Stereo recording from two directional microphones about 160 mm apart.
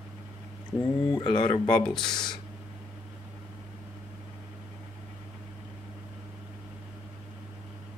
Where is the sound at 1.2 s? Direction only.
30° left (ahead or behind).